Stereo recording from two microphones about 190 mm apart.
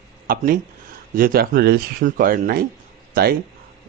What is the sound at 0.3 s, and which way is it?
Speech, 50° right (ahead or behind).